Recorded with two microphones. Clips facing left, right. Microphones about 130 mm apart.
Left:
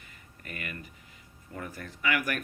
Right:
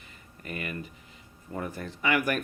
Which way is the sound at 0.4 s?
25° right (ahead or behind).